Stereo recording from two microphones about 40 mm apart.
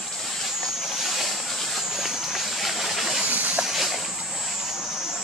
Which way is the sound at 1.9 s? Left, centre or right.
Centre.